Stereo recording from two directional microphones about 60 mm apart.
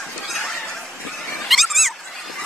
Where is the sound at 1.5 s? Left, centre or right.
Centre.